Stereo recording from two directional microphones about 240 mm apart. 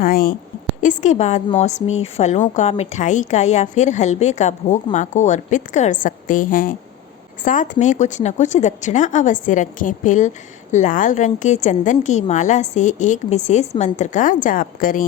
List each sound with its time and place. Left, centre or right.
0.0 s a woman's voice: left